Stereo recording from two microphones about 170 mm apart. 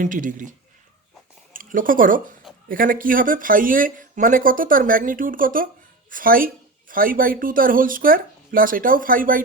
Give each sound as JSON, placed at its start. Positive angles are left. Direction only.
{"t": 0.0, "sound": "speech", "side_deg": -50}
{"t": 1.5, "sound": "speech", "side_deg": -55}